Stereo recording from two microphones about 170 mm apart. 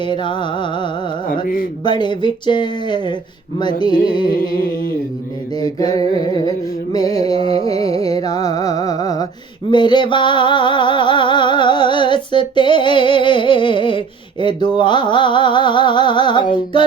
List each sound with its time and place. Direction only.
0.0 s music: 30° left (ahead or behind)
4.3 s a sound: 55° left (ahead or behind)
5.5 s music: 20° left (ahead or behind)
7.2 s music: 35° right (ahead or behind)
7.7 s music: 20° left (ahead or behind)